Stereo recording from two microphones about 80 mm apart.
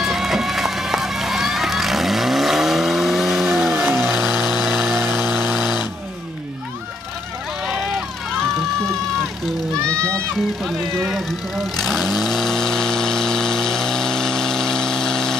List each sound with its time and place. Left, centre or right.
0.0 s run: centre
4.4 s chainsaw: centre
5.5 s a sound: centre
7.6 s vehicle: centre
10.6 s vehicle: centre